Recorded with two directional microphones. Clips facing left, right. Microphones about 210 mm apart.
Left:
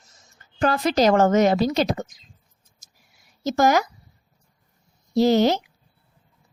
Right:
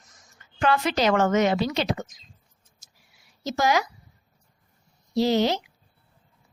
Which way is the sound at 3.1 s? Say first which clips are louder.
Left 6 dB; 45° left (ahead or behind).